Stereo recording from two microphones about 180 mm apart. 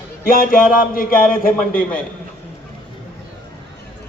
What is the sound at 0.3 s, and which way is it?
A man's voice, 50° left (ahead or behind).